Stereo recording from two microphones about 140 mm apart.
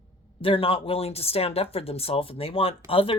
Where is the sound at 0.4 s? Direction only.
40° left (ahead or behind).